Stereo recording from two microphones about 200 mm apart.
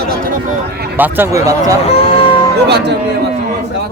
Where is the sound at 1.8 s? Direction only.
30° left (ahead or behind).